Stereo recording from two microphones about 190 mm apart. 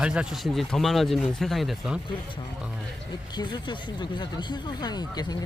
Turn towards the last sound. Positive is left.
turn(degrees=20)  # may be behind; listen again after turning